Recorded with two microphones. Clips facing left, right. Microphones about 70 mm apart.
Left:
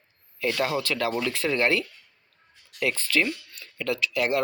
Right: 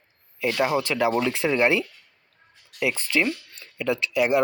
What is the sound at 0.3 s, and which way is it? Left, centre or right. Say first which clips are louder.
Speech: right 3 dB; centre.